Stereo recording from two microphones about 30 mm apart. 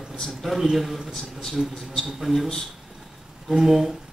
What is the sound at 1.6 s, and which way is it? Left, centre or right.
Speech, centre.